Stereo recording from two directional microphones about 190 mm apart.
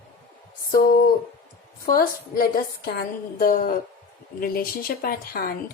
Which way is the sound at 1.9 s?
50° left (ahead or behind).